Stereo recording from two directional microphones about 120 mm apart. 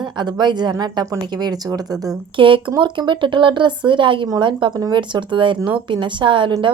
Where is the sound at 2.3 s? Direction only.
45° right (ahead or behind).